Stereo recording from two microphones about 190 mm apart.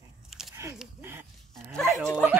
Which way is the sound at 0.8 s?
10° right (ahead or behind).